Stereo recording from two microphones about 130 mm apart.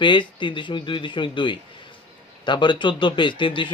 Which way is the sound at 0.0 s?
40° left (ahead or behind).